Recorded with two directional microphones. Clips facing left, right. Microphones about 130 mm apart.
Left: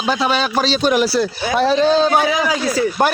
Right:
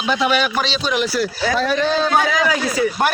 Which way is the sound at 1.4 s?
15° left (ahead or behind).